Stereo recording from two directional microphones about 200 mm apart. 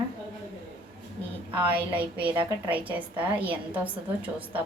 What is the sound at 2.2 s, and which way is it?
Speech, 25° right (ahead or behind).